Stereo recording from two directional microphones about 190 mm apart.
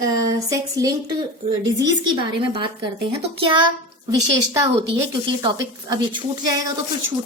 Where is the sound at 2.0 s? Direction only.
25° right (ahead or behind).